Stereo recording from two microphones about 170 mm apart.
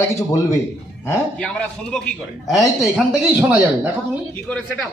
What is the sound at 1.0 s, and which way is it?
A man's voice, 5° left (ahead or behind).